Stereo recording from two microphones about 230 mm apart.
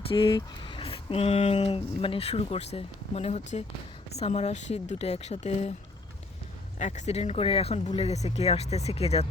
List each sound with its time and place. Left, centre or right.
0.1 s speech: left
6.7 s speech: left